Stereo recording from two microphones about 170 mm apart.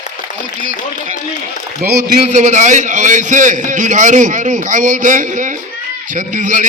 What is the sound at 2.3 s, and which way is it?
A man's voice, 45° right (ahead or behind).